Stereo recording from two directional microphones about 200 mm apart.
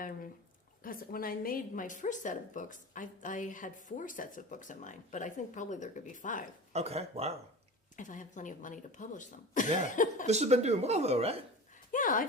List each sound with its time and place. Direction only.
0.8 s a woman's voice: 45° left (ahead or behind)
6.7 s speech: 30° right (ahead or behind)
7.9 s a woman's voice: 40° left (ahead or behind)
10.2 s speech: 35° right (ahead or behind)
11.9 s a sound: 40° left (ahead or behind)